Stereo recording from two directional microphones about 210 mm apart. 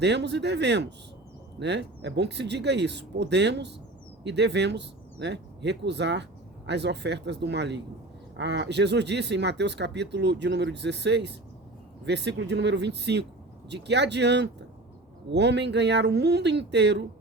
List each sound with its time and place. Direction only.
0.0 s speech: 55° right (ahead or behind)